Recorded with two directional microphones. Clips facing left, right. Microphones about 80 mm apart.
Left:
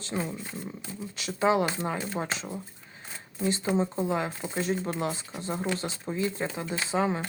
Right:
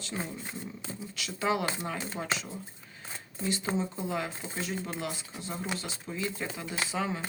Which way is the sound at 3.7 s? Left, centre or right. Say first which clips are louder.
Left 5 dB; left.